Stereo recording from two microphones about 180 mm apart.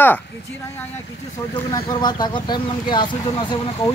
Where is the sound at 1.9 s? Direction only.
25° left (ahead or behind).